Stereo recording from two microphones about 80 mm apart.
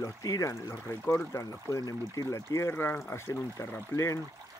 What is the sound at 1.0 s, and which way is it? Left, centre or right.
Speech, left.